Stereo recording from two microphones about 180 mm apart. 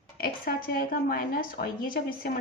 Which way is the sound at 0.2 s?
55° left (ahead or behind).